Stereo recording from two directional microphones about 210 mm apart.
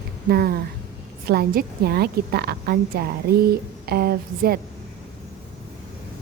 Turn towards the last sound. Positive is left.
turn(degrees=-45)  # may be behind; listen again after turning